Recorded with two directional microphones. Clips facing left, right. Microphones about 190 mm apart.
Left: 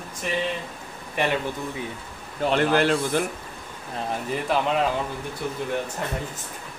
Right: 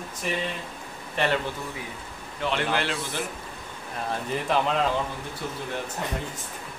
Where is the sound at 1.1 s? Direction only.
15° left (ahead or behind).